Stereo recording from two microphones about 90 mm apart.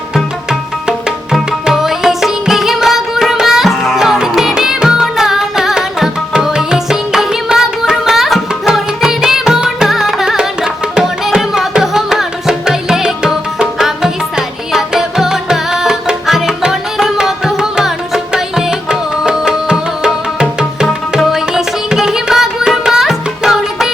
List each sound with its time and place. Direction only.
0.9 s music: 10° right (ahead or behind)